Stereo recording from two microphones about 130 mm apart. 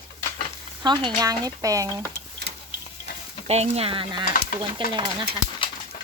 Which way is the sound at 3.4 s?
55° right (ahead or behind).